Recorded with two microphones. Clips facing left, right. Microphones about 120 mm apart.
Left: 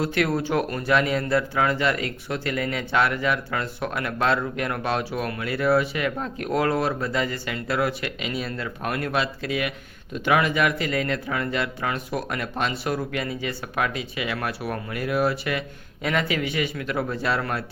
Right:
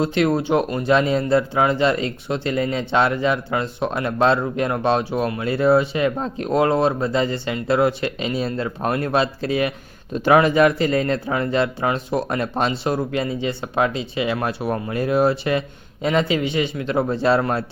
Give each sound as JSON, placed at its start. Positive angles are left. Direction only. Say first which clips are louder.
{"t": 0.0, "sound": "a man's voice", "louder": "right 5 dB", "side_deg": -25}